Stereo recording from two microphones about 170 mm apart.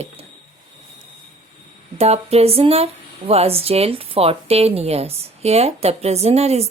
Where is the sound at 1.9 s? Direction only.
40° right (ahead or behind).